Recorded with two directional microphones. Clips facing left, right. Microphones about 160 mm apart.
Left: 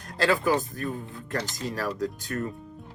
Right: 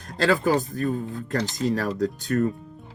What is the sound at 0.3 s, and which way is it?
Speech, 35° right (ahead or behind).